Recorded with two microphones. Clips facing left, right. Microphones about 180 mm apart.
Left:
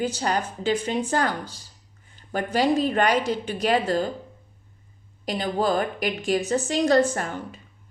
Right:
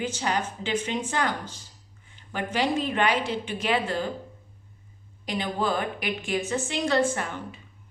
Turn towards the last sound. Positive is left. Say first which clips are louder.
# left 1 dB
turn(degrees=40)  # may be behind; listen again after turning